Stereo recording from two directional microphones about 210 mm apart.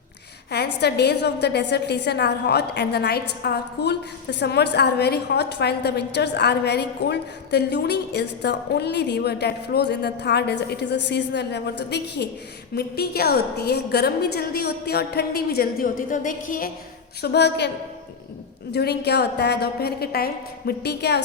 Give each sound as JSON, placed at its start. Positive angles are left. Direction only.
{"t": 0.8, "sound": "a woman's voice", "side_deg": 50}
{"t": 18.7, "sound": "a woman's voice", "side_deg": 50}